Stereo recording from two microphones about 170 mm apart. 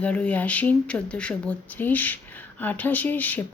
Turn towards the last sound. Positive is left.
turn(degrees=10)  # may be behind; listen again after turning